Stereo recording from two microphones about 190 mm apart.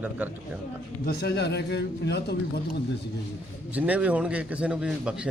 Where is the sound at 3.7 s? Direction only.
10° right (ahead or behind).